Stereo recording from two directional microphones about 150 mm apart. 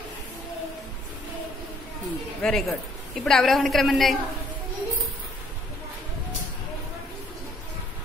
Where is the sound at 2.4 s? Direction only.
Centre (ahead or behind).